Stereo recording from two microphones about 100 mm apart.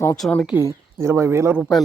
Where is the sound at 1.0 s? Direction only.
25° right (ahead or behind).